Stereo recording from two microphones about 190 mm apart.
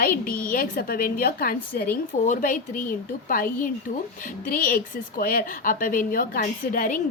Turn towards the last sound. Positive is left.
turn(degrees=45)  # may be behind; listen again after turning